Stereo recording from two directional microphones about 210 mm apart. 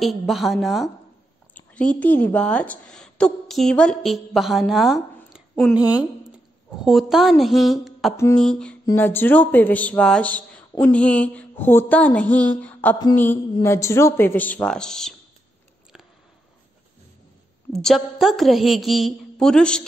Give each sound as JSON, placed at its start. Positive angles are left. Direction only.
{"t": 0.0, "sound": "a woman's voice", "side_deg": 0}
{"t": 6.8, "sound": "a woman's voice", "side_deg": 0}
{"t": 8.8, "sound": "a sound", "side_deg": 10}
{"t": 17.7, "sound": "a woman's voice", "side_deg": 0}